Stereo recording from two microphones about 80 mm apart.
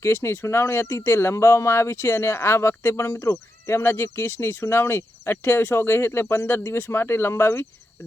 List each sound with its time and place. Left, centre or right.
0.0 s speech: left